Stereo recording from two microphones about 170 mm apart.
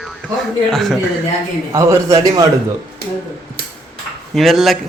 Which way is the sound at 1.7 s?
20° right (ahead or behind).